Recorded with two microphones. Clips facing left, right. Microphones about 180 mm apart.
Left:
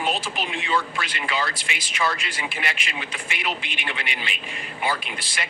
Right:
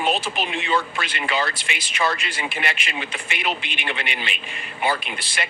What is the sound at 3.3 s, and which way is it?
Speech, 25° right (ahead or behind).